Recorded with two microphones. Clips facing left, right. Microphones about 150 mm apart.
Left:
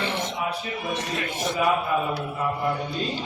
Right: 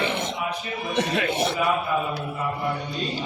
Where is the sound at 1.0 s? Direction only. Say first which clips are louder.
Right 6 dB; 65° right (ahead or behind).